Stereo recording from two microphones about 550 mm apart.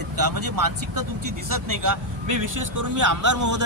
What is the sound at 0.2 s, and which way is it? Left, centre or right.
A man's voice, right.